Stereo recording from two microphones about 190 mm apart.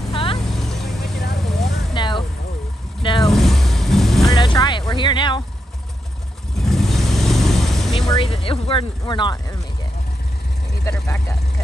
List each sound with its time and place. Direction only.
0.1 s vehicle: 30° left (ahead or behind)
0.6 s vehicle: centre (ahead or behind)
2.0 s vehicle: 25° left (ahead or behind)
3.2 s vehicle: centre (ahead or behind)
4.3 s music: 20° left (ahead or behind)
6.6 s vehicle: centre (ahead or behind)
8.1 s speech: 30° left (ahead or behind)
10.9 s speech: 15° left (ahead or behind)